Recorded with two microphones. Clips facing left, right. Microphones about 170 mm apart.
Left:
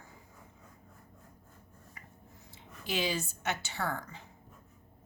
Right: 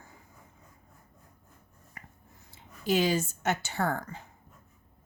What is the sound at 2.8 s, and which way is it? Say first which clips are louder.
Speech: right 7 dB; 45° right (ahead or behind).